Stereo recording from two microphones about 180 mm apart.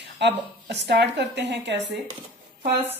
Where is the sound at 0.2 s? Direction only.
70° right (ahead or behind).